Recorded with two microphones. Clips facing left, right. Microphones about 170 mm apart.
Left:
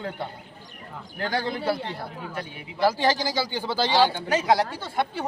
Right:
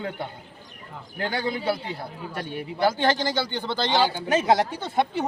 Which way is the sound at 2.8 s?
5° left (ahead or behind).